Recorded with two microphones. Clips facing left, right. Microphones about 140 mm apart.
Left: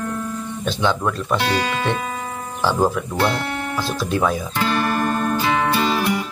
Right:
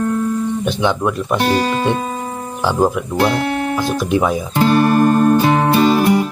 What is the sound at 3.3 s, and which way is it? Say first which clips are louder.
Music: right 7 dB; 55° right (ahead or behind).